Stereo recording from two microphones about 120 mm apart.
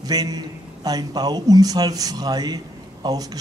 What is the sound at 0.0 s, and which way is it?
A man's voice, 30° right (ahead or behind).